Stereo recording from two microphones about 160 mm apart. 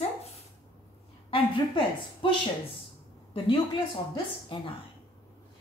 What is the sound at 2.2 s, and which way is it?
A woman's voice, 30° left (ahead or behind).